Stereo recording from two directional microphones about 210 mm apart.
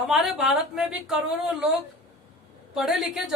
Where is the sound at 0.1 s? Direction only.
Centre (ahead or behind).